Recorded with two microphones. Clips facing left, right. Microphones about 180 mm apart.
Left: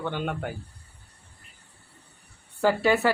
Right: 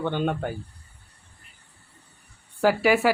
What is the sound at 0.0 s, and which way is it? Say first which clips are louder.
Speech: right 5 dB; 20° right (ahead or behind).